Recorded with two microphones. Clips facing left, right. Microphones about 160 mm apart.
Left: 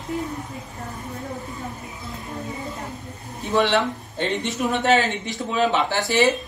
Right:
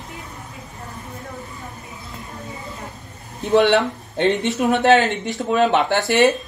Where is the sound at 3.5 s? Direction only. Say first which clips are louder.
Right 5 dB; 65° right (ahead or behind).